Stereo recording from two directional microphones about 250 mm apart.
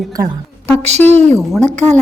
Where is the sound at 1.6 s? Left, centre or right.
Right.